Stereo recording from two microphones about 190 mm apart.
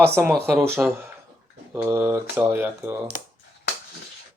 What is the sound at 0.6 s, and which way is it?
Speech, 10° right (ahead or behind).